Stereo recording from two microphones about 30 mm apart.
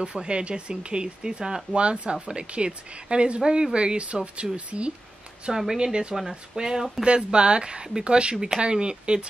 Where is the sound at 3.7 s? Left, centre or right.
Right.